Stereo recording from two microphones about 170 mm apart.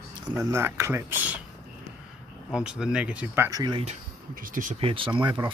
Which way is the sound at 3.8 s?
50° right (ahead or behind).